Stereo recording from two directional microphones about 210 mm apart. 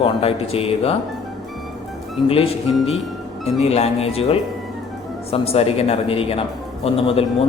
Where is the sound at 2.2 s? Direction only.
25° left (ahead or behind).